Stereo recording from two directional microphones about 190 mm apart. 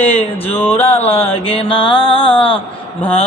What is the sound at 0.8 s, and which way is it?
Mantra, 30° left (ahead or behind).